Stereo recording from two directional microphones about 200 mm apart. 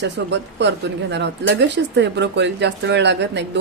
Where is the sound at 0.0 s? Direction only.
60° right (ahead or behind).